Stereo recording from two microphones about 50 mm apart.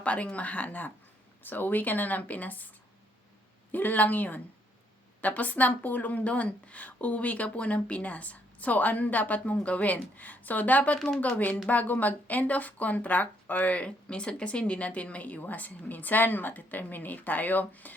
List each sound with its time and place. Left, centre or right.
0.0 s a woman's voice: left
3.7 s a woman's voice: left